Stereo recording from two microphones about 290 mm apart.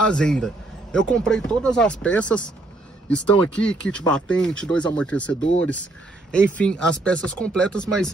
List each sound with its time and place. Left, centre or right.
0.0 s speech: centre